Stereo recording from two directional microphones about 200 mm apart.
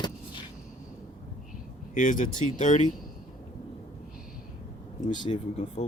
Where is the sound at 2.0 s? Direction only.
40° left (ahead or behind).